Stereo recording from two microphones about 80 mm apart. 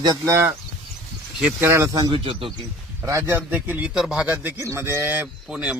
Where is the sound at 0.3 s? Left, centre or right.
Right.